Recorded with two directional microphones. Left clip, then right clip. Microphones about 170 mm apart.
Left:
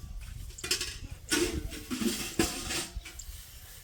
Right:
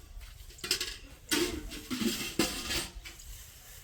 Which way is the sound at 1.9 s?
40° right (ahead or behind).